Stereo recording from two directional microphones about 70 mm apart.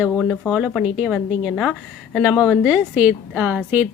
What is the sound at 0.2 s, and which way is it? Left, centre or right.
Speech, centre.